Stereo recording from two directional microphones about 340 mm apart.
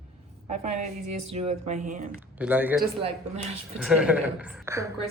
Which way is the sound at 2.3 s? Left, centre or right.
Centre.